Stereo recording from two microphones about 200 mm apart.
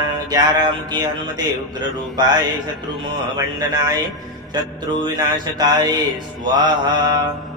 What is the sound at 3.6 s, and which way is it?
Music, 20° right (ahead or behind).